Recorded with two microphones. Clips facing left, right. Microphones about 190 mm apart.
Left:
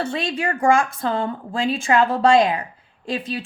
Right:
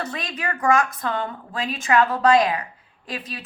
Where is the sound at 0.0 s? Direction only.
30° left (ahead or behind).